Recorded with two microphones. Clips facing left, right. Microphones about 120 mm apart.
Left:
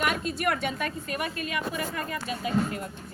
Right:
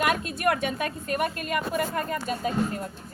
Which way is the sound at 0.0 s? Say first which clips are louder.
Right 3 dB; 55° right (ahead or behind).